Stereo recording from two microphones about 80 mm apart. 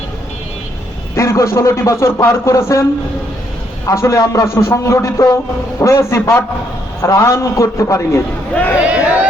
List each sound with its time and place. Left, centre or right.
1.1 s speech: left
3.8 s speech: left
8.8 s a sound: centre